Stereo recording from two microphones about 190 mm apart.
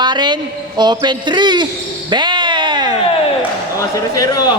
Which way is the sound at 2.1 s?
25° right (ahead or behind).